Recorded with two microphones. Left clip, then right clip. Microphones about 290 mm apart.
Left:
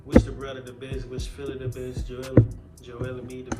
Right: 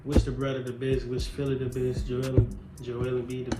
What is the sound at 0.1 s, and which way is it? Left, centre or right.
Speech, centre.